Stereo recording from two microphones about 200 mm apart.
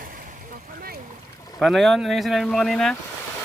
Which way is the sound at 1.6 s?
Centre (ahead or behind).